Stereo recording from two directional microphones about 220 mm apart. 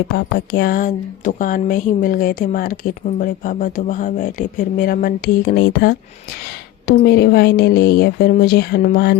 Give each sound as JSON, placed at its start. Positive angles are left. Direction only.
{"t": 0.3, "sound": "speech", "side_deg": 45}